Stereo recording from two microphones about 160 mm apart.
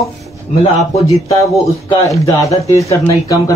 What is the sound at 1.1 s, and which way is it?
A man's voice, 20° left (ahead or behind).